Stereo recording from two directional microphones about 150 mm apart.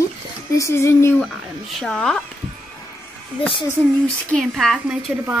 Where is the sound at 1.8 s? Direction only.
5° left (ahead or behind).